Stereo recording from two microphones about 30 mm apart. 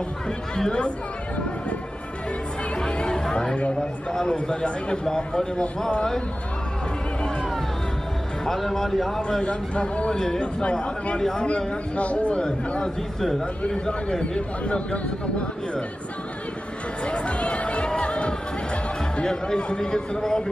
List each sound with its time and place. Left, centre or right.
0.7 s speech: left
2.8 s music: left
3.2 s chatter: left
4.3 s speech: left
5.0 s a man's voice: left
8.5 s a man's voice: centre
9.4 s speech: left
10.1 s a man's voice: centre
10.4 s speech: left
14.6 s speech: left
17.0 s music: left
19.2 s a man's voice: left